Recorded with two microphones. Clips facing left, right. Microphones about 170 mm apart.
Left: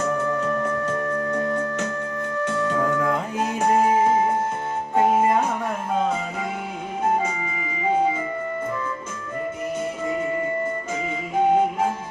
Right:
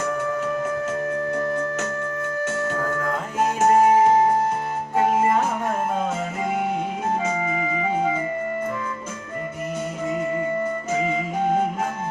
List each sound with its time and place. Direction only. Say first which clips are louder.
3.3 s music: right 5 dB; 45° right (ahead or behind)